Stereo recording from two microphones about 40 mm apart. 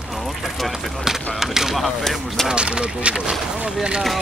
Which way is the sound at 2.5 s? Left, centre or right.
Right.